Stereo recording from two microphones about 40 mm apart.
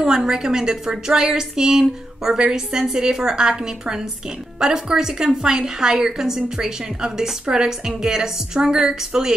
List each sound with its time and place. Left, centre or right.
0.0 s a woman's voice: centre